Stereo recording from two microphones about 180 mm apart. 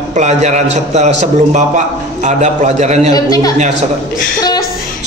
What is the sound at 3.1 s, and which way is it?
Speech, 20° left (ahead or behind).